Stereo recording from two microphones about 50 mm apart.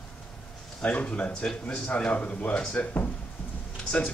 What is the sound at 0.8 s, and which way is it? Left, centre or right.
A man's voice, left.